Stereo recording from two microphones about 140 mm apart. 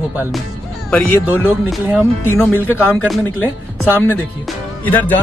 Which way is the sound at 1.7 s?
10° right (ahead or behind).